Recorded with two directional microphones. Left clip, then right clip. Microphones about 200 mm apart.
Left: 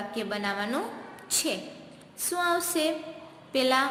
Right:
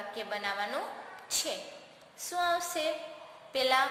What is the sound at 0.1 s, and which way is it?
Speech, 10° left (ahead or behind).